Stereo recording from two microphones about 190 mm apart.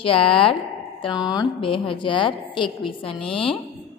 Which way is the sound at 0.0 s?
30° left (ahead or behind).